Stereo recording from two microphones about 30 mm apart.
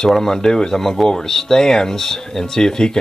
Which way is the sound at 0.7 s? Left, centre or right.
Centre.